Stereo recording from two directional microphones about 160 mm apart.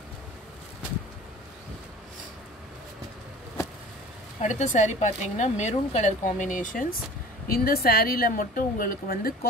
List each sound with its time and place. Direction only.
4.4 s a woman's voice: 45° left (ahead or behind)
7.4 s a woman's voice: 70° left (ahead or behind)